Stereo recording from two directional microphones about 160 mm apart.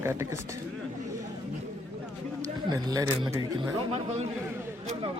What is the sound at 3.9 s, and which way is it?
Speech, 45° right (ahead or behind).